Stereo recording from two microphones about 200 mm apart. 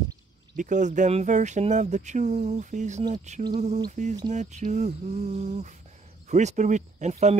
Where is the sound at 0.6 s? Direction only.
40° right (ahead or behind).